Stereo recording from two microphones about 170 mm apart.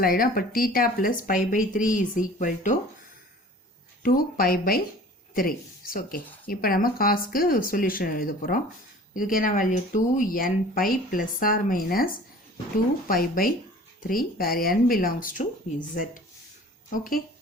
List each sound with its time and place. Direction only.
0.0 s speech: 55° left (ahead or behind)
4.0 s speech: 60° left (ahead or behind)
16.9 s speech: 55° left (ahead or behind)